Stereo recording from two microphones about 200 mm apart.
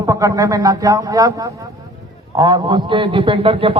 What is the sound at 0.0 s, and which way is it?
A man's voice, 15° right (ahead or behind).